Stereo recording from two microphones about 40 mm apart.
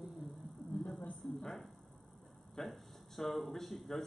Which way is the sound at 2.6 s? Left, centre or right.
Centre.